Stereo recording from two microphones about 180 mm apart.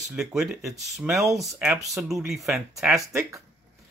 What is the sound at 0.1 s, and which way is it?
Speech, centre (ahead or behind).